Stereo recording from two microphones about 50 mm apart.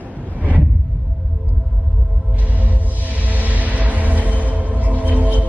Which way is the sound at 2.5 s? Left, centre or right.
Right.